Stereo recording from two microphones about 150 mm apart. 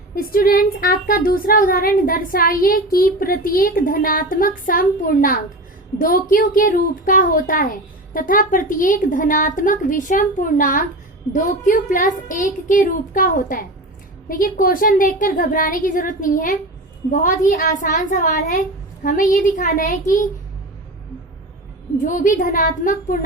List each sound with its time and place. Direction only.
0.2 s a woman's voice: 75° left (ahead or behind); by 20.2 s 60° left (ahead or behind)
22.0 s a woman's voice: 60° left (ahead or behind)